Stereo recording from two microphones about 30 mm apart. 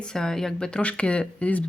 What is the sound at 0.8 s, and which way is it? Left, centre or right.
Speech, left.